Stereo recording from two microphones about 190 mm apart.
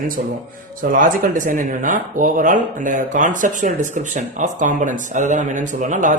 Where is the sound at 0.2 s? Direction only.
40° right (ahead or behind).